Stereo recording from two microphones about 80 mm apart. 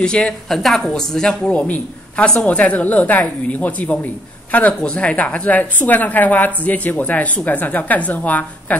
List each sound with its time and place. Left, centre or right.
0.0 s a woman's voice: centre